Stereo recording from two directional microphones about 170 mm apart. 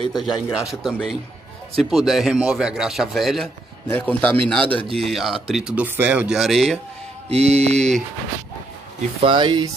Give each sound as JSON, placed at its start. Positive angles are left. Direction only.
{"t": 0.2, "sound": "a man's voice", "side_deg": 0}
{"t": 7.2, "sound": "mantra", "side_deg": -40}
{"t": 9.2, "sound": "speech", "side_deg": -30}